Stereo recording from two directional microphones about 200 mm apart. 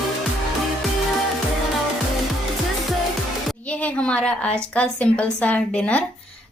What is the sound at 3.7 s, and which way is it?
A woman's voice, 5° left (ahead or behind).